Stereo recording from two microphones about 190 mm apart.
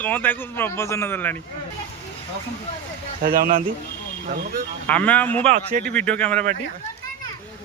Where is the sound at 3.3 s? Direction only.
45° right (ahead or behind).